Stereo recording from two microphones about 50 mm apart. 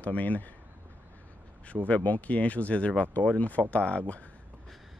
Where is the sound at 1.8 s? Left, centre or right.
Left.